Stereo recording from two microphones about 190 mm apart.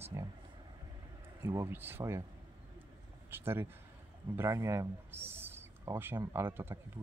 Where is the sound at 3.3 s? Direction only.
10° right (ahead or behind).